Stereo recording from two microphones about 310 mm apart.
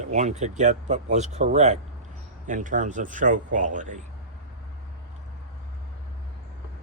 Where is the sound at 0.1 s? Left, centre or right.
Right.